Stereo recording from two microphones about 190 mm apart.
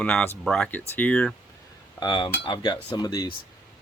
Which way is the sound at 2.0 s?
25° left (ahead or behind).